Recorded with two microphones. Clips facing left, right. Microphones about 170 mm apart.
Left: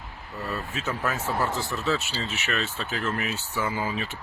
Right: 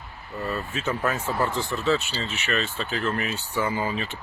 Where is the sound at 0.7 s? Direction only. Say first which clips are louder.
Right 3 dB; 5° left (ahead or behind).